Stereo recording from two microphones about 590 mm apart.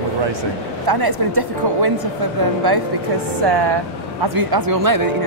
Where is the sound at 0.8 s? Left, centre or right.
Right.